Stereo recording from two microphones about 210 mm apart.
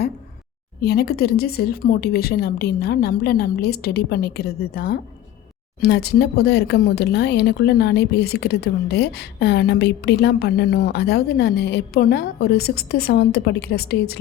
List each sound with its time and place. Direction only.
0.8 s speech: 50° left (ahead or behind)